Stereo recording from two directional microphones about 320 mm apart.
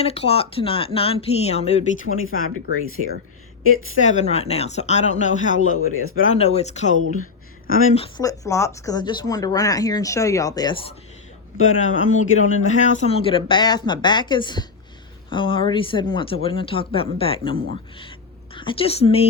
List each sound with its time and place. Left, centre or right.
0.0 s speech: centre
2.0 s speech: left
4.0 s speech: left
5.5 s speech: left
6.3 s speech: centre
11.5 s speech: left
12.6 s a woman's voice: left